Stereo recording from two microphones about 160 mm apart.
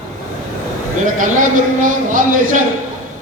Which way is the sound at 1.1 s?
55° right (ahead or behind).